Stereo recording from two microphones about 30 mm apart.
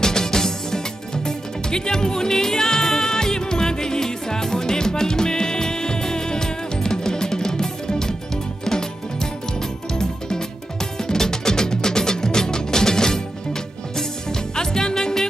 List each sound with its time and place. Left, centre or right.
0.0 s music: centre